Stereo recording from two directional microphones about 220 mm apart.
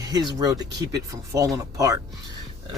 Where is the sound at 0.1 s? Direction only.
20° right (ahead or behind).